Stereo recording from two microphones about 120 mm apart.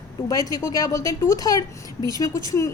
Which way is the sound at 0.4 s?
30° left (ahead or behind).